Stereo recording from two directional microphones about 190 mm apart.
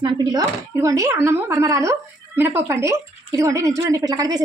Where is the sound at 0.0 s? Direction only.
25° right (ahead or behind).